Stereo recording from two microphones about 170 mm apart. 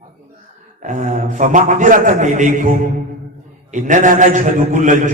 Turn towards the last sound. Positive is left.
turn(degrees=-45)  # may be behind; listen again after turning